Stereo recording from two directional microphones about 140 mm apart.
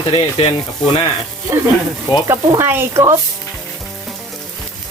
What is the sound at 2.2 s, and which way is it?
Speech, 20° right (ahead or behind).